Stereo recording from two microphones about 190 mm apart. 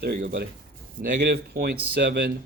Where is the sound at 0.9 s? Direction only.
50° right (ahead or behind).